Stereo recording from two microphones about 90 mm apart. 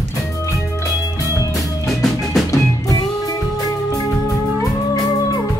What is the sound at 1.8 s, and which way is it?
Music, centre (ahead or behind).